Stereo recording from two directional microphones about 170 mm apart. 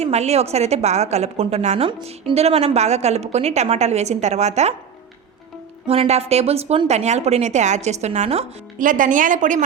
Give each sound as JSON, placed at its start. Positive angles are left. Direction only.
{"t": 0.0, "sound": "a woman's voice", "side_deg": -40}
{"t": 5.9, "sound": "a woman's voice", "side_deg": -35}